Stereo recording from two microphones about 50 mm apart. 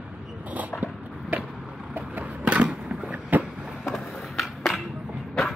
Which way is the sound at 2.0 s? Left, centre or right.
Right.